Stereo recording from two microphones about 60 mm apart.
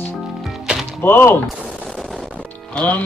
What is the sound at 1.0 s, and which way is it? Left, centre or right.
Speech, left.